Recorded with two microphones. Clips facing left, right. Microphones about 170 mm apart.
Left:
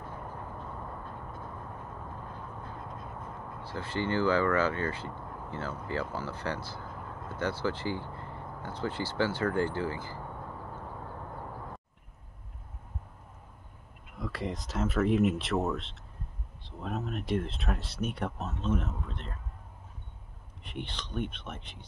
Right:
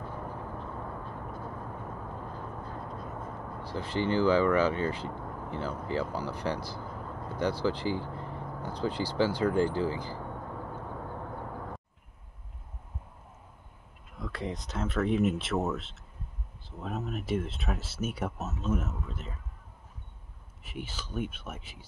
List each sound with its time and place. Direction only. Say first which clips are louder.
3.6 s speech: right 2 dB; 15° right (ahead or behind)
14.1 s speech: left 1 dB; centre (ahead or behind)
20.6 s speech: left 1 dB; 5° right (ahead or behind)